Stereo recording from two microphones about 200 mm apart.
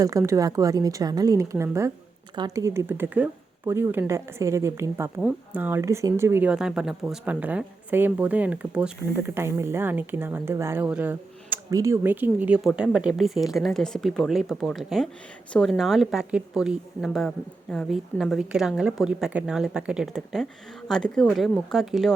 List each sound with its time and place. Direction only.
0.0 s a woman's voice: 15° right (ahead or behind); by 22.1 s centre (ahead or behind)